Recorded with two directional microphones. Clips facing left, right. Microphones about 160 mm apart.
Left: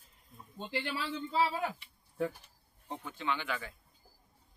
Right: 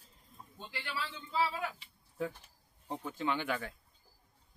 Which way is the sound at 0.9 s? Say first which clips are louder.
Left 4 dB; 30° left (ahead or behind).